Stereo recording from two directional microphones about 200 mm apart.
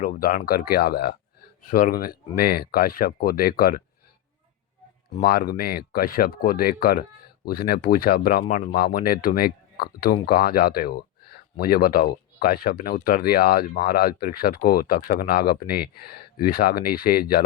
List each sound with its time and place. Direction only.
0.0 s speech: 40° left (ahead or behind)
5.2 s speech: 50° left (ahead or behind)